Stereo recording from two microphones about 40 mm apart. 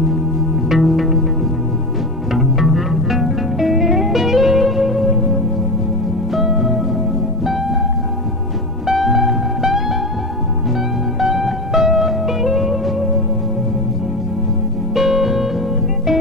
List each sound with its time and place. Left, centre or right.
0.0 s music: centre
2.3 s music: centre
8.9 s music: centre
11.1 s music: centre
15.0 s music: centre